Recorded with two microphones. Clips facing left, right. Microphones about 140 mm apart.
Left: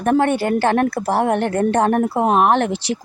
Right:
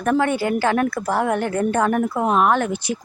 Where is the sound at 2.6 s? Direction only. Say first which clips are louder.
Left 3 dB; 90° left.